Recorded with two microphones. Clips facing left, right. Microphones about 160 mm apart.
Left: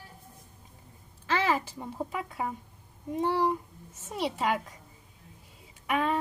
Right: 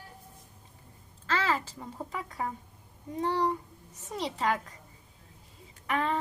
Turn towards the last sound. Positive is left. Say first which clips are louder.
# left 2 dB
turn(degrees=15)  # may be behind; listen again after turning